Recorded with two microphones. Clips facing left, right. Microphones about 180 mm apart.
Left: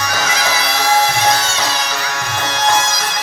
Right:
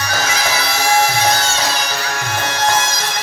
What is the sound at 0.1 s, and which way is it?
Music, 30° right (ahead or behind).